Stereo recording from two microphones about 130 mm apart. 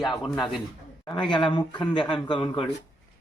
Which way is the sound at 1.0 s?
40° left (ahead or behind).